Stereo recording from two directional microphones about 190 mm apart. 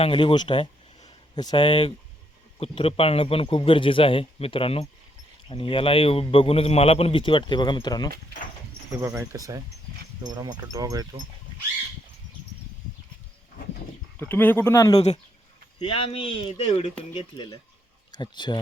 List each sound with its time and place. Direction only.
0.0 s a man's voice: 30° left (ahead or behind)
9.0 s speech: 15° right (ahead or behind)
14.2 s speech: 10° left (ahead or behind)
14.9 s a man's voice: 35° left (ahead or behind)